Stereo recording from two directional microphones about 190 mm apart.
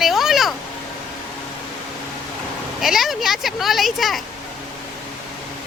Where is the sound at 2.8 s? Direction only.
Centre (ahead or behind).